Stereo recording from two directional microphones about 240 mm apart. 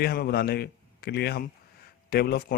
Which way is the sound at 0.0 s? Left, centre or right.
Left.